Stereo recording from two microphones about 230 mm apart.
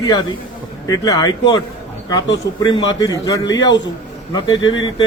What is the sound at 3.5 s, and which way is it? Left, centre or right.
Speech, left.